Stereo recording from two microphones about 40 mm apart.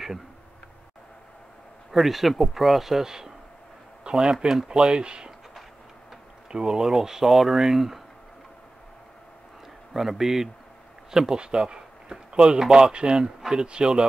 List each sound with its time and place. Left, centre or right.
1.9 s speech: centre; by 5.3 s right
6.5 s speech: centre
9.9 s speech: centre; by 14.0 s right